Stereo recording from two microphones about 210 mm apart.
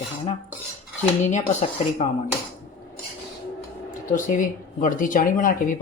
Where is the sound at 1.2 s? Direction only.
35° left (ahead or behind).